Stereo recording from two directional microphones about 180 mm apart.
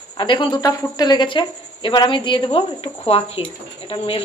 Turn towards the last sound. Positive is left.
turn(degrees=30)  # may be behind; listen again after turning